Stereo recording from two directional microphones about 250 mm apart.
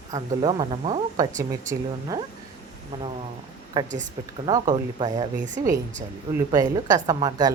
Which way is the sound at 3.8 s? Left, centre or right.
Centre.